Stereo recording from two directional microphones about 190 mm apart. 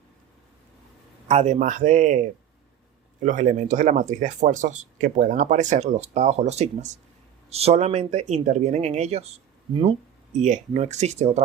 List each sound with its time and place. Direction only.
1.3 s speech: 35° right (ahead or behind)
3.2 s speech: 40° right (ahead or behind)
10.3 s speech: 40° right (ahead or behind)